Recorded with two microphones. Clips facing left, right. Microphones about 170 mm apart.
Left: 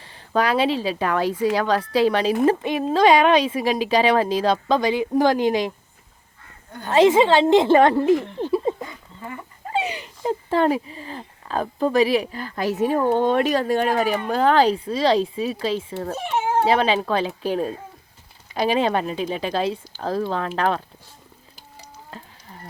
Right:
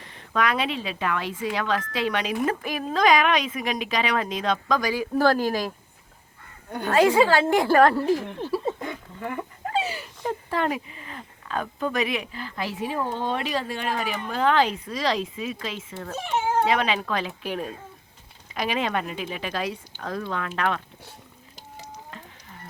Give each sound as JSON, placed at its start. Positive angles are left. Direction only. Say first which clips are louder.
{"t": 0.0, "sound": "speech", "louder": "left 3 dB", "side_deg": 30}
{"t": 6.7, "sound": "a woman's voice", "louder": "right 4 dB", "side_deg": -70}
{"t": 6.9, "sound": "a woman's voice", "louder": "left 4 dB", "side_deg": 25}
{"t": 8.4, "sound": "a sound", "louder": "left 5 dB", "side_deg": 20}
{"t": 8.9, "sound": "a sound", "louder": "right 4 dB", "side_deg": -70}
{"t": 9.7, "sound": "speech", "louder": "left 3 dB", "side_deg": 20}